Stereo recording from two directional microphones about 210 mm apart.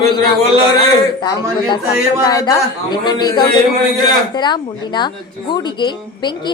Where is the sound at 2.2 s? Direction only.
20° left (ahead or behind).